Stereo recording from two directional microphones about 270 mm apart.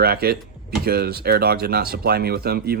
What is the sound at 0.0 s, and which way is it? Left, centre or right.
Speech, right.